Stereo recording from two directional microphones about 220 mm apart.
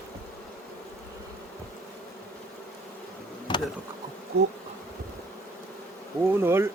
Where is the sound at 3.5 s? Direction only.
20° left (ahead or behind).